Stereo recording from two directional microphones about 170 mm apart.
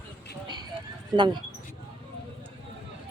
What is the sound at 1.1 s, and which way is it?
Speech, 25° right (ahead or behind).